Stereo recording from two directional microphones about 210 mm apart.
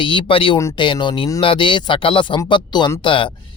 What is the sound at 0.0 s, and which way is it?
Speech, 25° left (ahead or behind).